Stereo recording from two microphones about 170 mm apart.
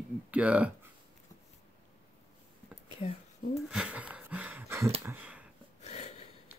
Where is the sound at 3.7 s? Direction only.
5° right (ahead or behind).